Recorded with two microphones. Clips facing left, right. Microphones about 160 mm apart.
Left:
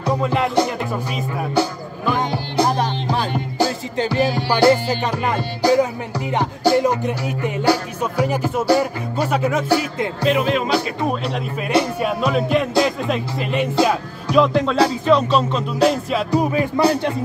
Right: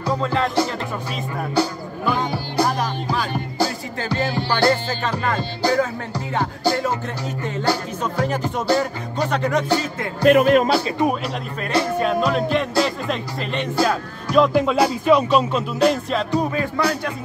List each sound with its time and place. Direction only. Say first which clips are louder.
0.0 s speech: left 2 dB; 20° left (ahead or behind)
1.1 s music: left 1 dB; 5° left (ahead or behind)
2.6 s music: left 2 dB; 30° left (ahead or behind)
3.5 s music: left 4 dB; 15° left (ahead or behind)
10.2 s speech: right 6 dB; 50° right (ahead or behind)
12.0 s music: even; 5° left (ahead or behind)
14.3 s music: even; 5° right (ahead or behind)
16.3 s music: left 6 dB; 15° left (ahead or behind)
16.8 s a man's voice: left 6 dB; 30° left (ahead or behind)